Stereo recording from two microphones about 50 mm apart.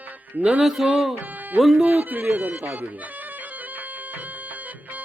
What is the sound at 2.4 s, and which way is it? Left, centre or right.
Speech, right.